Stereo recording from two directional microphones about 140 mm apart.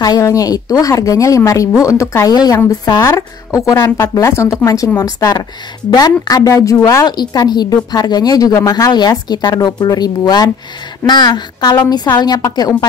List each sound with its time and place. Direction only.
0.0 s a woman's voice: 25° left (ahead or behind)